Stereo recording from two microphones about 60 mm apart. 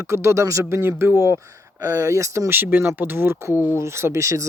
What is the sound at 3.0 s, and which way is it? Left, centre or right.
Speech, right.